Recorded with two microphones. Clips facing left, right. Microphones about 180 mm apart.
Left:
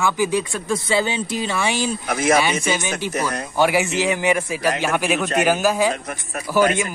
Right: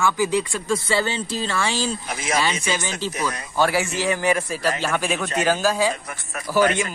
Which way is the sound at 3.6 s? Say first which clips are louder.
Left 3 dB; 15° left (ahead or behind).